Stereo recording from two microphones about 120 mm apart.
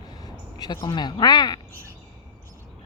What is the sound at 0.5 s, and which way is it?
Speech, 35° left (ahead or behind).